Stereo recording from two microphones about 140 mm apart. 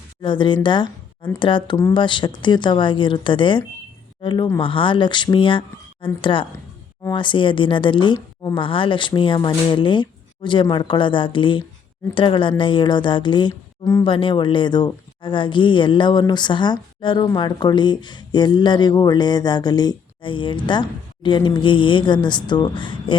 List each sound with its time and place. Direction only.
0.2 s speech: 35° left (ahead or behind)